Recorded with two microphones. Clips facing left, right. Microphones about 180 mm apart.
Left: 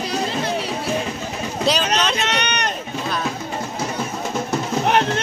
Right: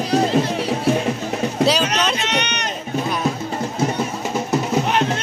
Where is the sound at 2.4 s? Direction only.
60° left (ahead or behind).